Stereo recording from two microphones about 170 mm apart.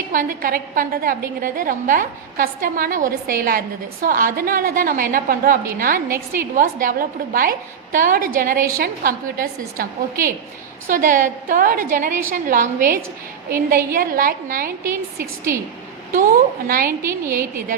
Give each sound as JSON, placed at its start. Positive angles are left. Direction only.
{"t": 0.1, "sound": "a woman's voice", "side_deg": -55}
{"t": 14.8, "sound": "a woman's voice", "side_deg": -15}
{"t": 16.6, "sound": "a woman's voice", "side_deg": -55}
{"t": 17.0, "sound": "a woman's voice", "side_deg": -15}